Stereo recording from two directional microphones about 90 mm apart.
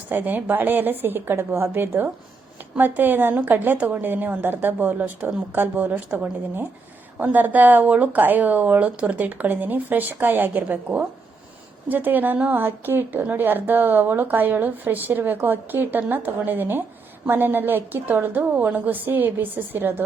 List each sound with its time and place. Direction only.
0.1 s a woman's voice: 20° right (ahead or behind)